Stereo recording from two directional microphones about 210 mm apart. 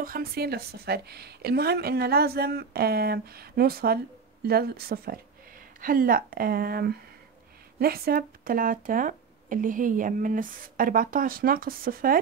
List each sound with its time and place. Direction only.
0.0 s a woman's voice: 45° right (ahead or behind)